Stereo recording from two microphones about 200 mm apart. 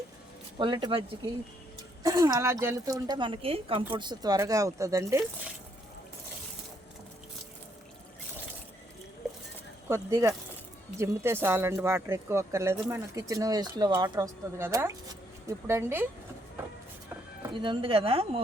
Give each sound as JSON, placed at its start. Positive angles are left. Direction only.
{"t": 0.6, "sound": "speech", "side_deg": -25}
{"t": 2.0, "sound": "speech", "side_deg": -15}
{"t": 9.9, "sound": "speech", "side_deg": -15}
{"t": 17.5, "sound": "speech", "side_deg": -25}